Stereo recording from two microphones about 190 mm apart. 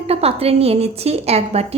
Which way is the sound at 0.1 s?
30° right (ahead or behind).